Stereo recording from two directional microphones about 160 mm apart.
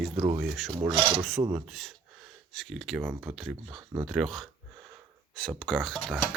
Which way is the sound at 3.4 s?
Centre (ahead or behind).